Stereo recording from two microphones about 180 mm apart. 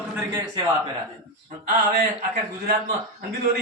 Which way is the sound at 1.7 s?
45° right (ahead or behind).